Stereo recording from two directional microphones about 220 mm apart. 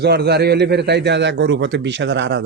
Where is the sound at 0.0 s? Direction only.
50° right (ahead or behind).